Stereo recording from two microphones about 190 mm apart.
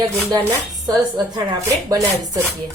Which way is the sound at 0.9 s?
25° right (ahead or behind).